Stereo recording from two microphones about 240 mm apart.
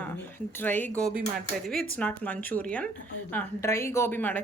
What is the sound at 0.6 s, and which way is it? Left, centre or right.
Speech, centre.